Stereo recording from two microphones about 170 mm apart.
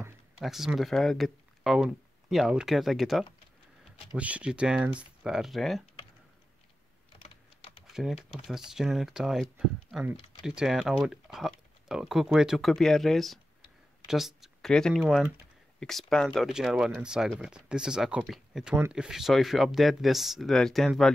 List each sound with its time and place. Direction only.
0.4 s speech: centre (ahead or behind)
7.2 s typing: 35° left (ahead or behind)
7.8 s speech: centre (ahead or behind)